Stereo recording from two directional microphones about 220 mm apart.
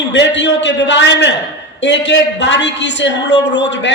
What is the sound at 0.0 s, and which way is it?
A woman's voice, 55° left (ahead or behind).